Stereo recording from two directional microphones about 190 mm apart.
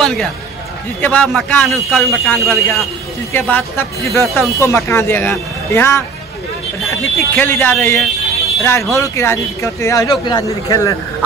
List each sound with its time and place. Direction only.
0.0 s speech: centre (ahead or behind)
4.4 s speech: 15° left (ahead or behind)